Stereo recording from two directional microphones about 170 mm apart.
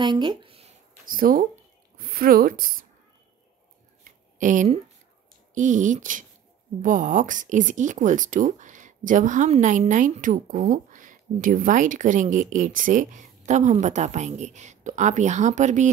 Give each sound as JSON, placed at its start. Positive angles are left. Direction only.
{"t": 0.0, "sound": "a sound", "side_deg": -25}
{"t": 1.0, "sound": "speech", "side_deg": -55}
{"t": 4.4, "sound": "speech", "side_deg": -50}